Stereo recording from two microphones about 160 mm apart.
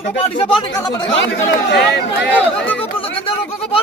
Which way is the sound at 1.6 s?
90° left.